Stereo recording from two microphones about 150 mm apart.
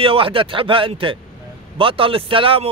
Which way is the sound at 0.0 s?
35° right (ahead or behind).